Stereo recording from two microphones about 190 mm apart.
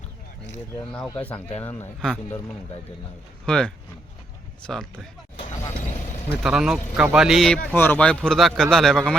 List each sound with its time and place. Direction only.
1.0 s speech: 10° left (ahead or behind)
1.3 s speech: 30° left (ahead or behind)
1.6 s speech: 5° left (ahead or behind)
3.4 s a man's voice: 5° left (ahead or behind)
6.2 s a man's voice: 5° right (ahead or behind)